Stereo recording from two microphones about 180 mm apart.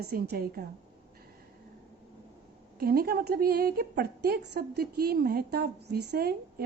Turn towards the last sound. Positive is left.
turn(degrees=-60)  # may be behind; listen again after turning